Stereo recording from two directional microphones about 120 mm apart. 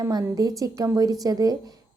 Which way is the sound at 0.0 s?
30° right (ahead or behind).